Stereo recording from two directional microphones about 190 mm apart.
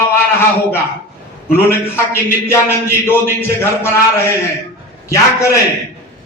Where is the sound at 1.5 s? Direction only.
10° left (ahead or behind).